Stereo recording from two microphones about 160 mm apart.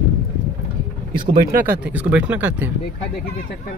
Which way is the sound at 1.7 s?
10° right (ahead or behind).